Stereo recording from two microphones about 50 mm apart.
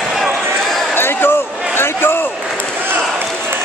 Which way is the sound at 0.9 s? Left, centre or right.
Left.